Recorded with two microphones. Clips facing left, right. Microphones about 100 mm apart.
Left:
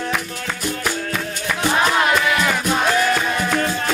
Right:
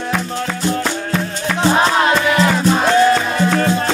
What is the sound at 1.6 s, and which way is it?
Music, 25° right (ahead or behind).